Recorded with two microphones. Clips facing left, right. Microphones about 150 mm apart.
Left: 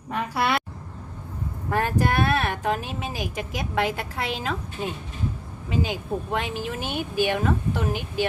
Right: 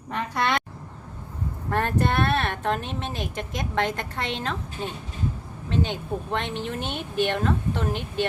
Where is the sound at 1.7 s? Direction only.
5° left (ahead or behind).